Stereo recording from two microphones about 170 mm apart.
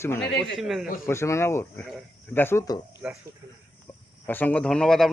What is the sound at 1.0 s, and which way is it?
A man's voice, 15° left (ahead or behind).